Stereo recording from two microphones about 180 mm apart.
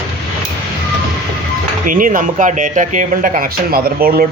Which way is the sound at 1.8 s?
50° right (ahead or behind).